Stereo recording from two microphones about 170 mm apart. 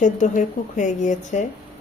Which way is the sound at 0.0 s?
45° left (ahead or behind).